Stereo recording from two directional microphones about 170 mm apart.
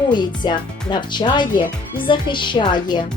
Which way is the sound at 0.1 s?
25° left (ahead or behind).